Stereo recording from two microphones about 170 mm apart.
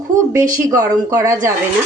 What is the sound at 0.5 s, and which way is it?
Speech, 20° right (ahead or behind).